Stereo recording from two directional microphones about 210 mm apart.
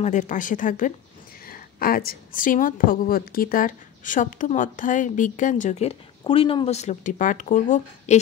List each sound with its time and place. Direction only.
0.0 s a woman's voice: 35° left (ahead or behind)